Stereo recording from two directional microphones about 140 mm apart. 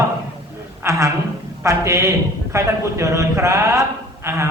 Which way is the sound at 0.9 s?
20° right (ahead or behind).